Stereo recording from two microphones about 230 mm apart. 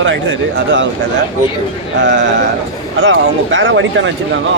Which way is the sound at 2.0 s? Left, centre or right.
Right.